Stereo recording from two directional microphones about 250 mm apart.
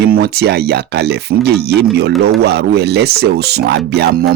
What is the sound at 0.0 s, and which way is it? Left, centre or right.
Speech, right.